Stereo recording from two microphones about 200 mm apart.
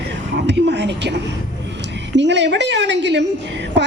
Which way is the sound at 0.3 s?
60° right (ahead or behind).